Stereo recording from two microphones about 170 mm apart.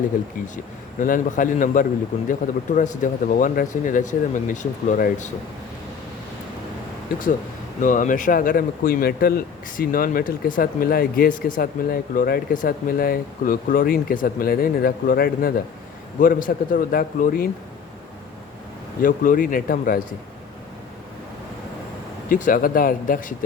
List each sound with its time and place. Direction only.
0.4 s speech: 50° left (ahead or behind)
7.8 s speech: 50° left (ahead or behind)
19.0 s speech: 50° left (ahead or behind)
22.3 s speech: 50° left (ahead or behind)